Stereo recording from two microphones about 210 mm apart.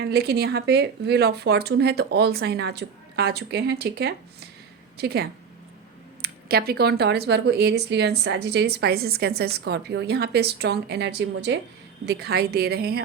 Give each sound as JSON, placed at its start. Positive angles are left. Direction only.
{"t": 0.0, "sound": "speech", "side_deg": -50}